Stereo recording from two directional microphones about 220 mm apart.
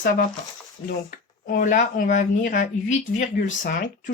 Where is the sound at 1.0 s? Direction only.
40° left (ahead or behind).